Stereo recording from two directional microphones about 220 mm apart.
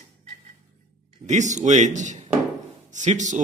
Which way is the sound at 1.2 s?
35° right (ahead or behind).